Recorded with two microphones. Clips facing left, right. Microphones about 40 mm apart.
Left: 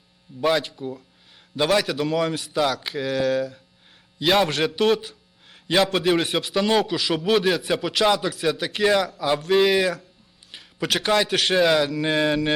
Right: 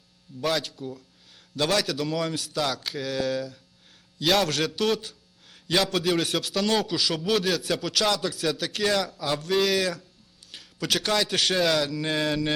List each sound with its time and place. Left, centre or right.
0.4 s a man's voice: left
10.5 s a sound: centre
11.1 s a man's voice: left